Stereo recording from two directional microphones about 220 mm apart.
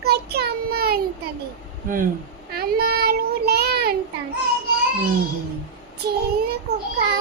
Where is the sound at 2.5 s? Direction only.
45° right (ahead or behind).